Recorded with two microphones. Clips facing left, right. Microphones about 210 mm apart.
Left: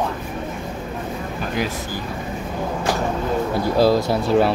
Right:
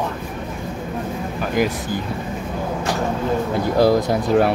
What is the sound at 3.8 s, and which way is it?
Speech, 15° right (ahead or behind).